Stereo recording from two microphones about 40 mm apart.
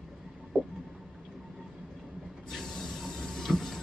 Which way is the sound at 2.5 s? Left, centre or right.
Centre.